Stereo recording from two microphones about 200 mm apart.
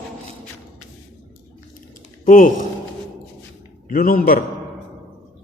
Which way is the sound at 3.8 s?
45° left (ahead or behind).